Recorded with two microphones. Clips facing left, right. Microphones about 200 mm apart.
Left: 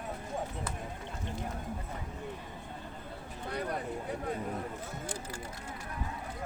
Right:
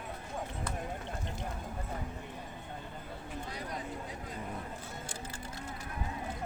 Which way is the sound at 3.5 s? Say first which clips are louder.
Left 8 dB; 60° left (ahead or behind).